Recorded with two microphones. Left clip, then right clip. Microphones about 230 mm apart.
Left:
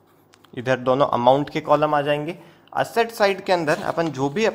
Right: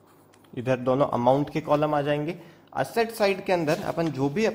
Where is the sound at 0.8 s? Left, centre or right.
Left.